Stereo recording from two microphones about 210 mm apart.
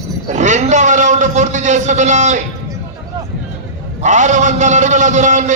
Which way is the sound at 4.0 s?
35° right (ahead or behind).